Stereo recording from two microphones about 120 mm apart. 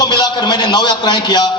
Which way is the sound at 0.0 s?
40° left (ahead or behind).